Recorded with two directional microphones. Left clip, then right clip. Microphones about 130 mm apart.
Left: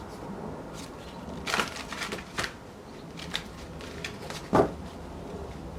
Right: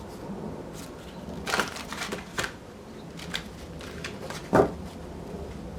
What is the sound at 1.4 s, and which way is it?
Typewriter, 15° right (ahead or behind).